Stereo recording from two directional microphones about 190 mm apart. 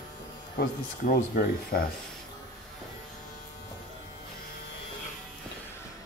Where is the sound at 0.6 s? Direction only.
50° left (ahead or behind).